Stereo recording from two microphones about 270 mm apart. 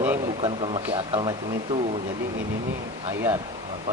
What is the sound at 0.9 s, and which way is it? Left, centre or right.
Speech, centre.